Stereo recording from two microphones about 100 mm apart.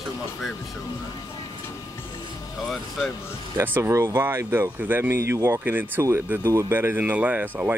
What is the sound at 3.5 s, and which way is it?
Speech, 20° right (ahead or behind).